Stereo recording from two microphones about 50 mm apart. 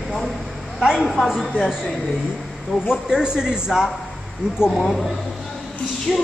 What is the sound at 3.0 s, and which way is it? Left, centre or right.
Speech, centre.